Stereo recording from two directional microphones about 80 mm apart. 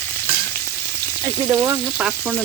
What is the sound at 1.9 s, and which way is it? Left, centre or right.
Frying, centre.